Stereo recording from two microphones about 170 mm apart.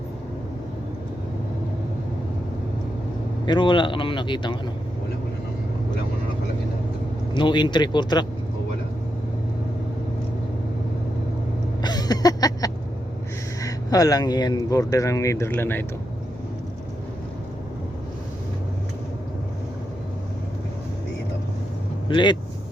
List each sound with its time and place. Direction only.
3.4 s speech: 30° left (ahead or behind)
7.3 s speech: 25° left (ahead or behind)
11.8 s a sound: 25° left (ahead or behind)
13.6 s speech: 20° left (ahead or behind)
22.1 s speech: 25° left (ahead or behind)